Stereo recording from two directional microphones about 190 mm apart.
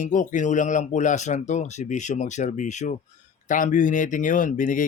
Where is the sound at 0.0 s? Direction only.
45° left (ahead or behind).